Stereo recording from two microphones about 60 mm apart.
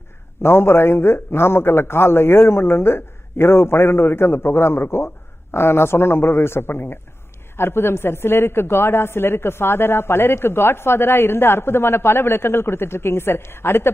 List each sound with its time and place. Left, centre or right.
0.4 s a man's voice: left